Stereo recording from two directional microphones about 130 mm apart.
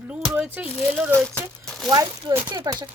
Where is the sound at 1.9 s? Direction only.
30° right (ahead or behind).